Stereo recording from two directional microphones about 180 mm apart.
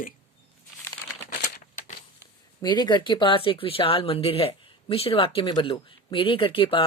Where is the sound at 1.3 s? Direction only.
60° left (ahead or behind).